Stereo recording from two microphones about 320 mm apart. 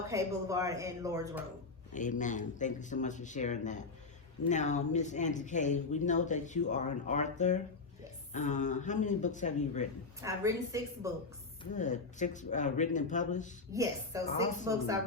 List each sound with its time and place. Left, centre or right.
0.1 s a woman's voice: centre
1.9 s speech: left
10.2 s a woman's voice: centre
11.6 s speech: left
13.7 s a woman's voice: centre